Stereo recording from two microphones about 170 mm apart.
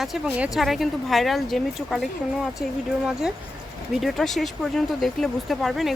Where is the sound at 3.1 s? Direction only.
5° right (ahead or behind).